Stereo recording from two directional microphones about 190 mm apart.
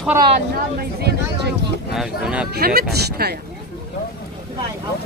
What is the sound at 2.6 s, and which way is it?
Speech, 55° right (ahead or behind).